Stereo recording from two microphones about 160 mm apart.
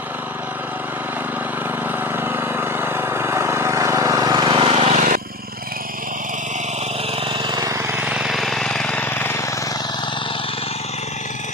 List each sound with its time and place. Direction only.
2.2 s vehicle: 15° right (ahead or behind); by 4.9 s 40° right (ahead or behind)
4.9 s vehicle: 55° right (ahead or behind)
7.3 s lawn mower: 30° right (ahead or behind)
8.0 s jackhammer: 5° right (ahead or behind); by 9.3 s 10° left (ahead or behind)